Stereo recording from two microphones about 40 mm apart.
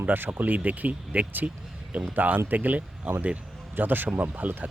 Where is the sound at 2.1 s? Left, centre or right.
Right.